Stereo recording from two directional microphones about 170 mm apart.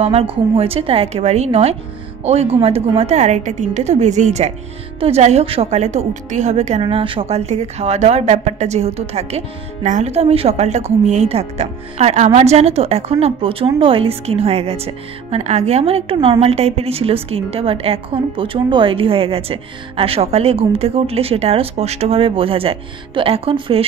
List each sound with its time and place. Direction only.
0.0 s speech: 35° right (ahead or behind)
6.8 s speech: 30° right (ahead or behind)